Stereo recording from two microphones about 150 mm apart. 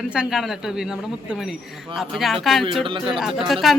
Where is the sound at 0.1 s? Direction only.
5° right (ahead or behind).